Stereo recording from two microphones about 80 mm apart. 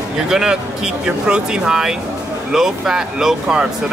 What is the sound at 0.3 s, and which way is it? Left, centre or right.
Speech, centre.